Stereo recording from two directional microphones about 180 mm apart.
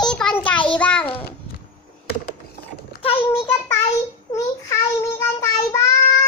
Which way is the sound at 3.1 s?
15° left (ahead or behind).